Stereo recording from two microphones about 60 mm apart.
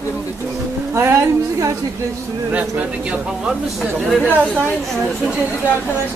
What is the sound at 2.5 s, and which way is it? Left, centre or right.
A man's voice, right.